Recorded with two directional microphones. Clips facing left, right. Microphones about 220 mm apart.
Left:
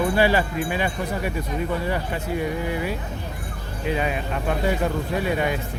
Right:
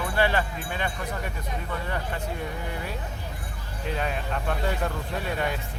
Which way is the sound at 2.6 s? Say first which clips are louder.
Left 8 dB; 5° left (ahead or behind).